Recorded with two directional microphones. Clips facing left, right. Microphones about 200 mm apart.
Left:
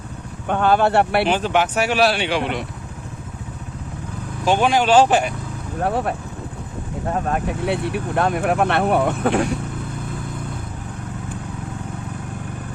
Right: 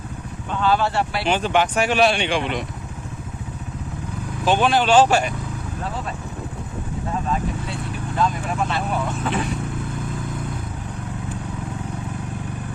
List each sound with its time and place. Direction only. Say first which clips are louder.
0.4 s speech: left 4 dB; 55° left (ahead or behind)
1.3 s speech: left 1 dB; 5° left (ahead or behind)
4.4 s speech: left 1 dB; 10° left (ahead or behind)
5.8 s speech: left 10 dB; 65° left (ahead or behind)